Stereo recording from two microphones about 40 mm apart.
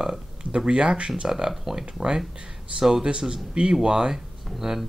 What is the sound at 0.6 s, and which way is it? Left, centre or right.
Speech, right.